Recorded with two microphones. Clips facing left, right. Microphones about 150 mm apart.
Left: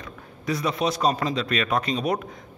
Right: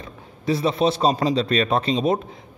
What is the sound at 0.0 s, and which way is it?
A man's voice, 30° right (ahead or behind).